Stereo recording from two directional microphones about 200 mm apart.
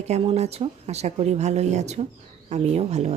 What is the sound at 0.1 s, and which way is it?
Speech, 35° right (ahead or behind).